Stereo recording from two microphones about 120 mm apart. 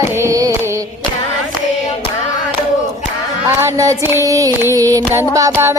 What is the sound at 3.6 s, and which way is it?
Child singing, 25° right (ahead or behind).